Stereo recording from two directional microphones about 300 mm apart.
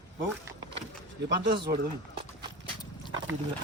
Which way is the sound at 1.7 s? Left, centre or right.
Centre.